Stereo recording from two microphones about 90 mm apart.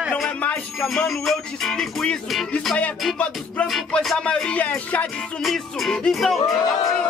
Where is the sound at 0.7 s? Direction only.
5° left (ahead or behind).